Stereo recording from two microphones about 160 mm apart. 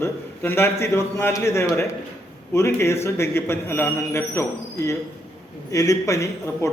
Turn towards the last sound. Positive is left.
turn(degrees=20)  # may be behind; listen again after turning